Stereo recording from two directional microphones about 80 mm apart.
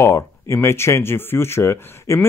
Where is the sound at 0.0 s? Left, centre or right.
Left.